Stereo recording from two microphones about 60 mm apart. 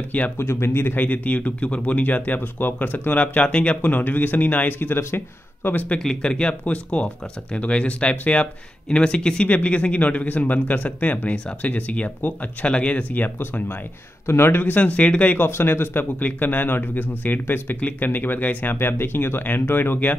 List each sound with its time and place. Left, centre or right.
0.4 s speech: left
3.9 s speech: left
5.9 s speech: centre; by 13.7 s left
14.2 s speech: left
15.4 s speech: left